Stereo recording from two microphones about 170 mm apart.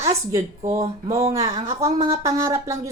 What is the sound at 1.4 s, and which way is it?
Speech, 35° right (ahead or behind).